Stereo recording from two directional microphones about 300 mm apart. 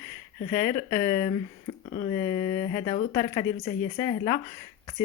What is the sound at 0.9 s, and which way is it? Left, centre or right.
Speech, centre.